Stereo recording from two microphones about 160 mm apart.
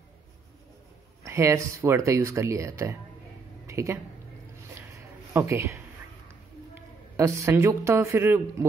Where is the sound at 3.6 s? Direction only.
20° right (ahead or behind).